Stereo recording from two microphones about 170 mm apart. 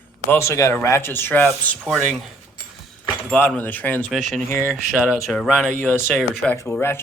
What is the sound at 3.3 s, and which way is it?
Speech, 10° left (ahead or behind).